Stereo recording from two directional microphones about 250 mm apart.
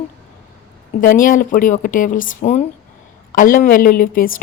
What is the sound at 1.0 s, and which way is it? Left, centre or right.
Speech, left.